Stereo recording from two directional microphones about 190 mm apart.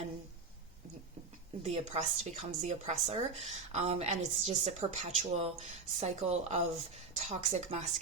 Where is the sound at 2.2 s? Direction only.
35° right (ahead or behind).